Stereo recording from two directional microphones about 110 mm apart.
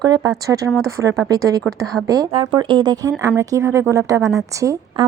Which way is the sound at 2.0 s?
35° right (ahead or behind).